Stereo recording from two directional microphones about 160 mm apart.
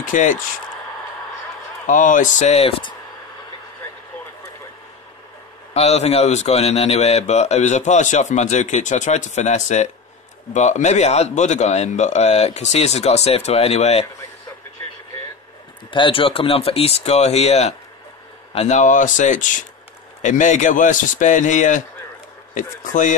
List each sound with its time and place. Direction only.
0.0 s speech: 55° left (ahead or behind)
1.9 s a man's voice: 55° left (ahead or behind); by 2.9 s 40° left (ahead or behind)
5.7 s a man's voice: 40° left (ahead or behind)
15.9 s a man's voice: 30° left (ahead or behind); by 23.1 s 50° left (ahead or behind)